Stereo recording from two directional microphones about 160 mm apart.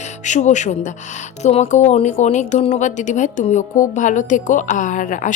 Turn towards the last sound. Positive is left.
turn(degrees=55)  # may be behind; listen again after turning